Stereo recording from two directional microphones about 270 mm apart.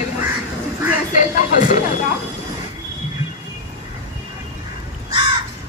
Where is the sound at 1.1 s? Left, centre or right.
Left.